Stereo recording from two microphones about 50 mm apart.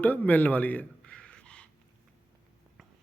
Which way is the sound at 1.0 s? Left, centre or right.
Centre.